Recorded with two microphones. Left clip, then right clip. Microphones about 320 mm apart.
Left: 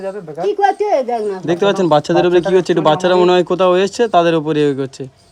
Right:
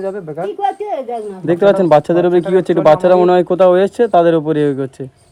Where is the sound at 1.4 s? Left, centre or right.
Centre.